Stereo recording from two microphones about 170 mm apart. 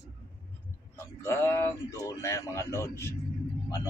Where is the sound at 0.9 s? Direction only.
15° left (ahead or behind).